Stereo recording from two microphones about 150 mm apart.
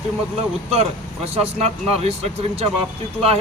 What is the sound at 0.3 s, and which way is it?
A man's voice, 40° right (ahead or behind).